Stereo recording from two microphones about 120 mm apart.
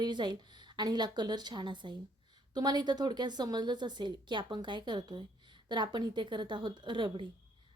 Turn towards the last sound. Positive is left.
turn(degrees=-40)  # may be behind; listen again after turning